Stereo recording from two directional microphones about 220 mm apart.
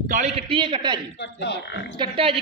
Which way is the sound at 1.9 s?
20° right (ahead or behind).